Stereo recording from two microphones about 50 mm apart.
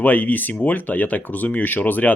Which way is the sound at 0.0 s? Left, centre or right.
Left.